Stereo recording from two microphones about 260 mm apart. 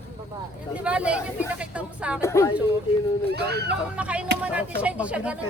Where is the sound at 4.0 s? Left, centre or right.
Centre.